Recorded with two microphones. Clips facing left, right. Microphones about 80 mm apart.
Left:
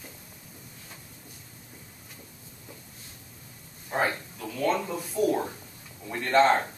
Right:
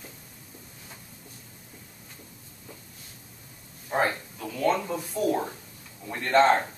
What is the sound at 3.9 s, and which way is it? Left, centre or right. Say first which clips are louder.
Speech: right 2 dB; centre.